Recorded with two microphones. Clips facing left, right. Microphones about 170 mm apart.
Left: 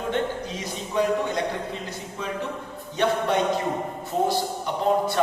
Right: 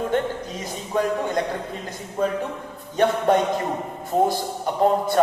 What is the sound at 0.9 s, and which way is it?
Speech, 45° right (ahead or behind).